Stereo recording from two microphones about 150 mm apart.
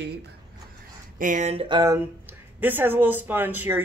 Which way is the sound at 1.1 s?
60° right (ahead or behind).